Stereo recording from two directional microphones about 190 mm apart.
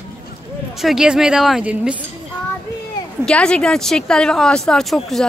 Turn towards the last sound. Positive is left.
turn(degrees=0)  # may be behind; listen again after turning